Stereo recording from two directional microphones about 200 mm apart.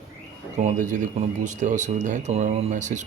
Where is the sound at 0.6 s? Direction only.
40° right (ahead or behind).